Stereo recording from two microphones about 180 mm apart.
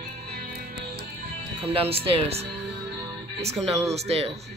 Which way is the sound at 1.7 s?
30° right (ahead or behind).